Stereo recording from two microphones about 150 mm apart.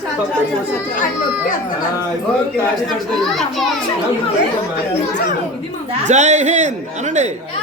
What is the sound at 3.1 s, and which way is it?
Speech, centre (ahead or behind).